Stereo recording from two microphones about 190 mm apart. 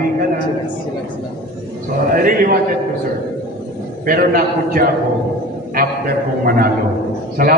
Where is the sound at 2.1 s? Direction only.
50° right (ahead or behind).